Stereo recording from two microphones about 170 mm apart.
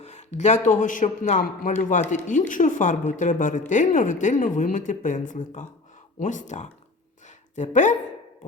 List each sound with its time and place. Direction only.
0.0 s speech: 40° left (ahead or behind)